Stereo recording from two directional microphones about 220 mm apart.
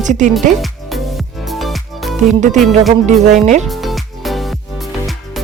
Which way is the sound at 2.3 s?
35° right (ahead or behind).